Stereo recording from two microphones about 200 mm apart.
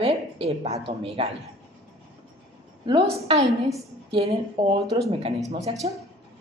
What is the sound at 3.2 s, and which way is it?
A woman's voice, 30° right (ahead or behind).